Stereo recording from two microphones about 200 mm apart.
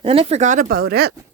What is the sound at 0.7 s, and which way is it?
Speech, 50° right (ahead or behind).